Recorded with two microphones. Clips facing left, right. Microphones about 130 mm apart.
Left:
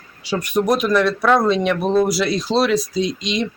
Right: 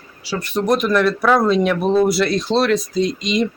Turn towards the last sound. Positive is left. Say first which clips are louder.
# right 3 dB
turn(degrees=0)  # may be behind; listen again after turning